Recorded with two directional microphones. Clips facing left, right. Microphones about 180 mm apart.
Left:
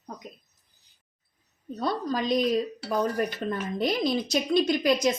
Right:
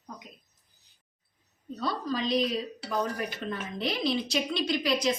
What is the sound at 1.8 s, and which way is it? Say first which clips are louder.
A woman's voice: left 3 dB; 45° left (ahead or behind).